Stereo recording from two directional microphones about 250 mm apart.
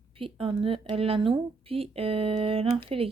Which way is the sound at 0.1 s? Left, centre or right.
Right.